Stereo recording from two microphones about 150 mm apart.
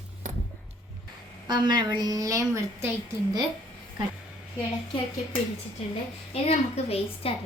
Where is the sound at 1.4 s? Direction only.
30° right (ahead or behind).